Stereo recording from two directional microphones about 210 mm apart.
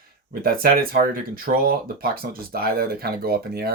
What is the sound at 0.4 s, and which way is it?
Speech, 45° right (ahead or behind).